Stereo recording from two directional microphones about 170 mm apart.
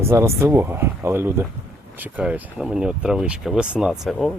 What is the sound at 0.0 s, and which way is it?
Speech, 15° right (ahead or behind).